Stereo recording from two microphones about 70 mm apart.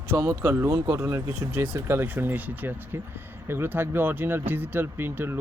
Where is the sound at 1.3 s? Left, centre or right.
Right.